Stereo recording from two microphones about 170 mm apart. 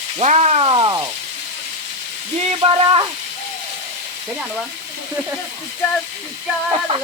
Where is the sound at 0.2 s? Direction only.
40° right (ahead or behind); by 1.1 s 25° right (ahead or behind).